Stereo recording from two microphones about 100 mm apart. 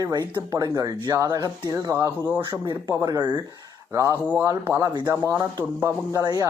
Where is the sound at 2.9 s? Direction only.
40° right (ahead or behind).